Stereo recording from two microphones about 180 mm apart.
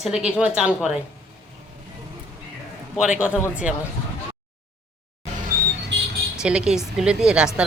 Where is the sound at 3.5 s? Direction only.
5° right (ahead or behind).